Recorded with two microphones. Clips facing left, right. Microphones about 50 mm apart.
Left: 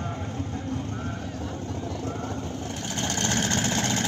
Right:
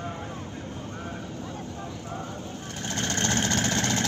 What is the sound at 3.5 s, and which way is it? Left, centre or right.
Vehicle, centre.